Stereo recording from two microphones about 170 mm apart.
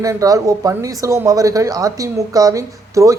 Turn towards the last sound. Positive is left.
turn(degrees=-20)  # may be behind; listen again after turning